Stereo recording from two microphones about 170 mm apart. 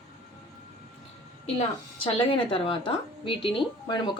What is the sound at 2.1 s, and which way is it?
A woman's voice, 30° left (ahead or behind).